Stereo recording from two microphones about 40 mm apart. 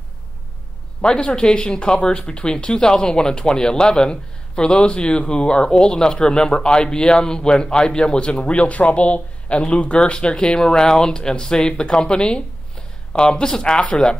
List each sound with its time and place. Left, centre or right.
1.0 s speech: left
9.9 s speech: left